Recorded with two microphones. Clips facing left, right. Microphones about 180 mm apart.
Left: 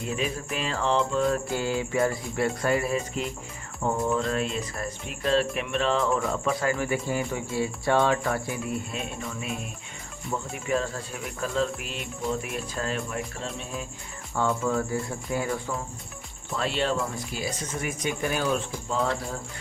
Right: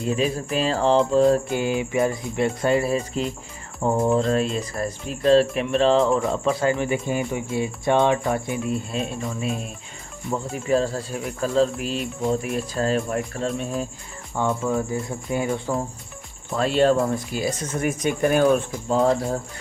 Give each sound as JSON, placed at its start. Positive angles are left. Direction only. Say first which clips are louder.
{"t": 0.2, "sound": "music", "louder": "right 7 dB", "side_deg": -35}
{"t": 1.5, "sound": "speech", "louder": "right 4 dB", "side_deg": -20}
{"t": 3.8, "sound": "music", "louder": "right 6 dB", "side_deg": -25}
{"t": 4.5, "sound": "speech", "louder": "right 5 dB", "side_deg": -35}
{"t": 10.5, "sound": "music", "louder": "right 7 dB", "side_deg": -35}
{"t": 14.4, "sound": "speech", "louder": "right 3 dB", "side_deg": -15}
{"t": 16.6, "sound": "speech", "louder": "right 8 dB", "side_deg": -45}